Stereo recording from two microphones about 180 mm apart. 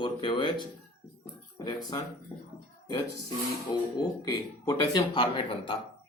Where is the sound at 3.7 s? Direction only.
20° left (ahead or behind).